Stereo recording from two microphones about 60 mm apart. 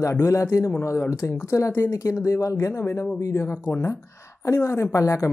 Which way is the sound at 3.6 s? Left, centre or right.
Left.